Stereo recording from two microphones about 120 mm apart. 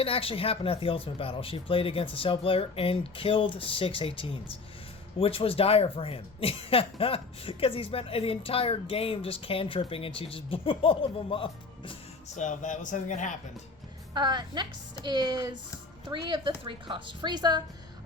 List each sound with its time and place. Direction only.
0.0 s speech: 50° left (ahead or behind)
12.4 s a man's voice: 90° left
14.1 s a woman's voice: 40° right (ahead or behind)